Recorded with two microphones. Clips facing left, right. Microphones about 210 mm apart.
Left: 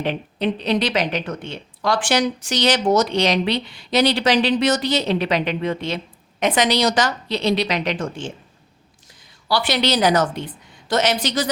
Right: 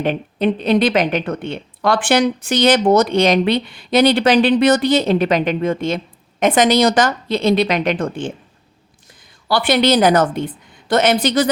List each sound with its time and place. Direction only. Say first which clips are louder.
0.0 s a woman's voice: right 5 dB; 50° right (ahead or behind)